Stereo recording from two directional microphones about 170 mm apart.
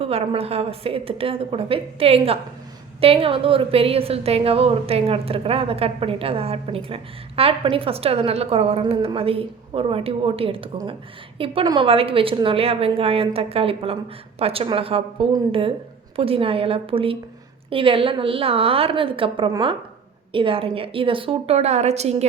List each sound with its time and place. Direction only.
0.0 s a woman's voice: 35° right (ahead or behind)